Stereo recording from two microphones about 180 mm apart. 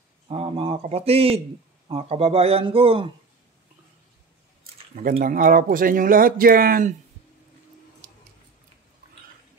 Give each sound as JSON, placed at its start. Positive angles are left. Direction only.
{"t": 0.3, "sound": "a man's voice", "side_deg": -35}
{"t": 5.2, "sound": "speech", "side_deg": -50}
{"t": 8.0, "sound": "a sound", "side_deg": -50}